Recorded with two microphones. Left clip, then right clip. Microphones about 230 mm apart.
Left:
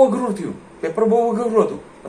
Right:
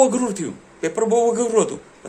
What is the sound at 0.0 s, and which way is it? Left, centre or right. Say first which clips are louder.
A man's voice: left 2 dB; right.